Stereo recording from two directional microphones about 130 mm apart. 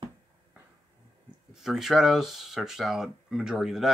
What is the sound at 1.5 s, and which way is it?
Speech, 5° right (ahead or behind).